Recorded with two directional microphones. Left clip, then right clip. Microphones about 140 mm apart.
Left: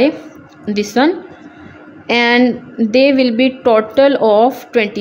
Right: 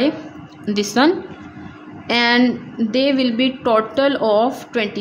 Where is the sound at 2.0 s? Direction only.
25° left (ahead or behind).